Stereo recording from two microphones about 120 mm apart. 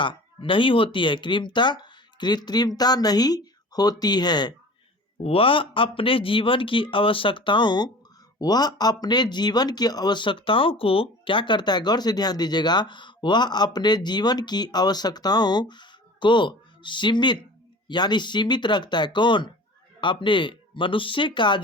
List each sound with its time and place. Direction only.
0.0 s speech: 45° left (ahead or behind)
5.1 s speech: 55° left (ahead or behind)